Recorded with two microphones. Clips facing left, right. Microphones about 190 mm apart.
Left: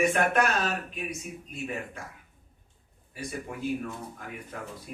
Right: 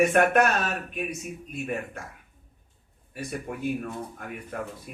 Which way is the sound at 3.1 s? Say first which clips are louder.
Right 3 dB; 55° right (ahead or behind).